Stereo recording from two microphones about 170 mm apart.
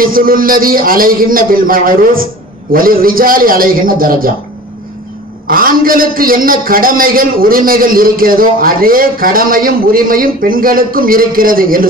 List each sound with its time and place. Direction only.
0.0 s a man's voice: 55° right (ahead or behind)
5.5 s a man's voice: 55° right (ahead or behind)